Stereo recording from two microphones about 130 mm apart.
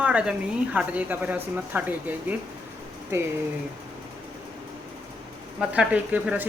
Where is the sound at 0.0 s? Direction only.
10° right (ahead or behind).